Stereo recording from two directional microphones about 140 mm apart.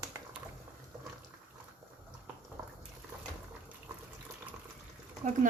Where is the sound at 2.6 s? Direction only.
25° right (ahead or behind).